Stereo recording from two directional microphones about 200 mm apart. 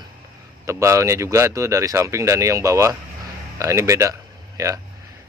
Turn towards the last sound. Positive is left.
turn(degrees=-15)  # may be behind; listen again after turning